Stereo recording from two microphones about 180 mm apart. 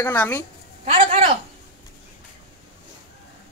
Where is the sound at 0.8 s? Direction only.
30° right (ahead or behind).